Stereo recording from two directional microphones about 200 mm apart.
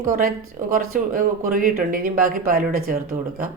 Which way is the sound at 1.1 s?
40° right (ahead or behind).